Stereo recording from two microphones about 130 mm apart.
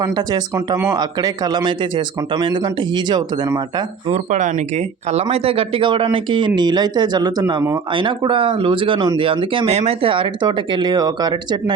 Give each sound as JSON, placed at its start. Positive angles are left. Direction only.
{"t": 0.0, "sound": "speech", "side_deg": -30}
{"t": 4.1, "sound": "speech", "side_deg": -70}
{"t": 5.1, "sound": "speech", "side_deg": -50}